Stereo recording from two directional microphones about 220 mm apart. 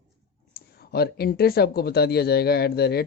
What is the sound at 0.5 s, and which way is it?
Speech, 45° left (ahead or behind).